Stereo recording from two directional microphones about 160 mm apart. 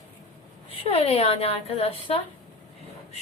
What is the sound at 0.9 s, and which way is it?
A woman's voice, 40° left (ahead or behind).